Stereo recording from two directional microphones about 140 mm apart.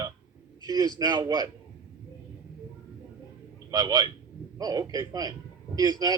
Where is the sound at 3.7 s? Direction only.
25° right (ahead or behind).